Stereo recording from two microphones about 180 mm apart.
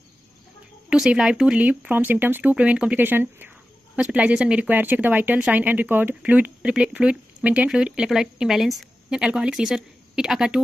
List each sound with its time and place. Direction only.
0.8 s speech: 5° right (ahead or behind)